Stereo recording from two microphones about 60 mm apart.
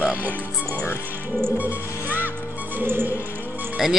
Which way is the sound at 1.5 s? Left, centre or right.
Right.